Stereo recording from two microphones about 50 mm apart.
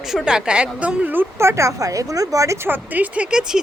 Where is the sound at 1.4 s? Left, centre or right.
Right.